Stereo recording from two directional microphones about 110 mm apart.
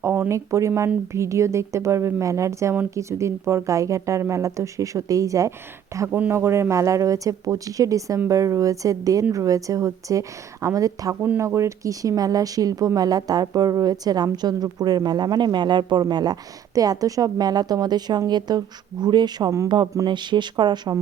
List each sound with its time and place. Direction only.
0.0 s speech: 20° right (ahead or behind); by 20.9 s 40° right (ahead or behind)